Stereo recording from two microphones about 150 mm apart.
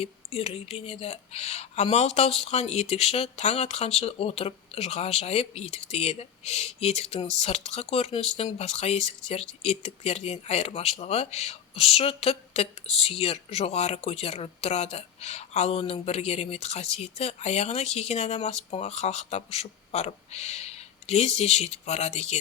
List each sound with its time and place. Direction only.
0.0 s speech: 40° left (ahead or behind)